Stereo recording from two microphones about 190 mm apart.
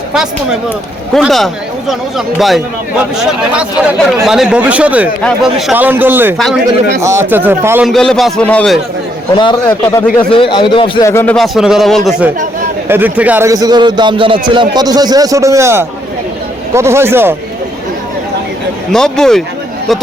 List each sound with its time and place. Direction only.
1.1 s speech: centre (ahead or behind)
4.3 s speech: 5° right (ahead or behind)
6.3 s speech: centre (ahead or behind)
7.0 s speech: 15° right (ahead or behind)
7.9 s speech: centre (ahead or behind)
10.3 s a man's voice: 25° left (ahead or behind)
11.0 s speech: 15° left (ahead or behind)
11.3 s a man's voice: centre (ahead or behind)
18.9 s speech: 5° left (ahead or behind)